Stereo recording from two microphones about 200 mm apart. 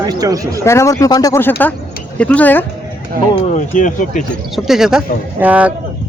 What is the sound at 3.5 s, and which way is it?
Speech, 40° left (ahead or behind).